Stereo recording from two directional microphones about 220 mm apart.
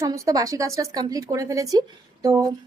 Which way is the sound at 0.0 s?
15° right (ahead or behind).